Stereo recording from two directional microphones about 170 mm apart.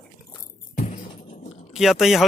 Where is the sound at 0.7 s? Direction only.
45° left (ahead or behind).